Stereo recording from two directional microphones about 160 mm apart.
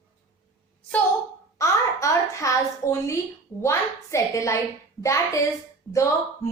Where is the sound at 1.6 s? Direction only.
20° left (ahead or behind).